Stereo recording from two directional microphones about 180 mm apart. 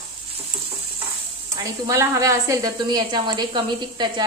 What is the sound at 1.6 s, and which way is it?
A woman's voice, 20° right (ahead or behind).